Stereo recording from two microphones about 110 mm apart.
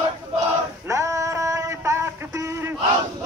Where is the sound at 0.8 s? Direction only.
25° right (ahead or behind).